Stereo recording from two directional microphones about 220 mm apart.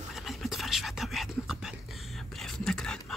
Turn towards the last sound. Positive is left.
turn(degrees=5)  # may be behind; listen again after turning